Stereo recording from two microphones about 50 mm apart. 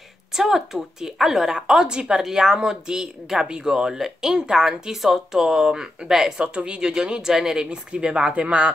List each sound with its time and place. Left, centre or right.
0.3 s speech: centre
6.4 s speech: centre